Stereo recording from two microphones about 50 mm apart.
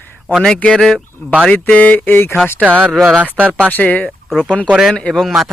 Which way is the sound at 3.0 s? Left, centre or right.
Right.